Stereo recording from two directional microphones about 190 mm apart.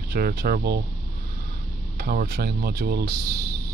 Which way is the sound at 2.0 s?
55° right (ahead or behind).